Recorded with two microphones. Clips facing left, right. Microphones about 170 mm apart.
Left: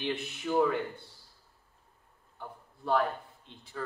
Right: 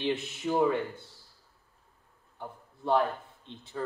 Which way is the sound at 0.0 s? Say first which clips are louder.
Right 3 dB; 25° right (ahead or behind).